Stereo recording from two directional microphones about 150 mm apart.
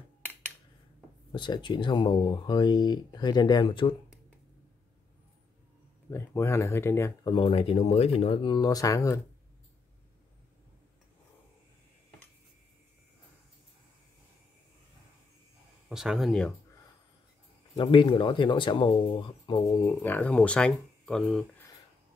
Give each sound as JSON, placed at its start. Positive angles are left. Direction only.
{"t": 1.3, "sound": "speech", "side_deg": 30}
{"t": 6.0, "sound": "speech", "side_deg": 15}
{"t": 7.2, "sound": "speech", "side_deg": 35}
{"t": 15.9, "sound": "speech", "side_deg": -5}
{"t": 17.7, "sound": "speech", "side_deg": 35}